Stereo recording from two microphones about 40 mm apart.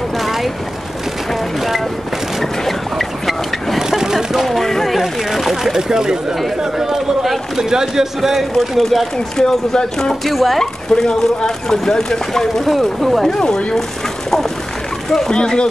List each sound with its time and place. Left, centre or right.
0.2 s vehicle: centre
2.6 s boat: centre
3.9 s vehicle: centre
4.5 s a sound: centre
4.9 s a sound: centre
6.6 s a man's voice: centre
9.4 s speech: centre
10.2 s speech: centre
10.6 s speech: centre
13.3 s speech: centre
15.0 s speech: centre
15.3 s speech: left